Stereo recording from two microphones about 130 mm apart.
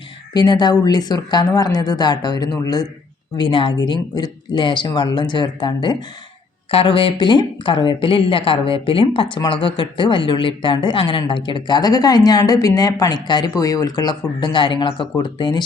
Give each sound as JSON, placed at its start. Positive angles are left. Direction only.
{"t": 0.3, "sound": "speech", "side_deg": 30}